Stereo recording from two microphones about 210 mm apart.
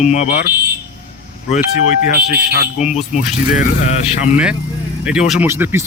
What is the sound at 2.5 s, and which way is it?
Speech, 40° left (ahead or behind).